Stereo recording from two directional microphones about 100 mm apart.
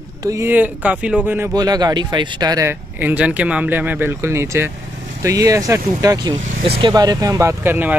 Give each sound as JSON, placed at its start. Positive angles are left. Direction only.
{"t": 0.2, "sound": "speech", "side_deg": -35}
{"t": 0.5, "sound": "speech", "side_deg": -15}
{"t": 1.5, "sound": "speech", "side_deg": -40}
{"t": 2.6, "sound": "speech", "side_deg": -20}
{"t": 7.6, "sound": "speech", "side_deg": -20}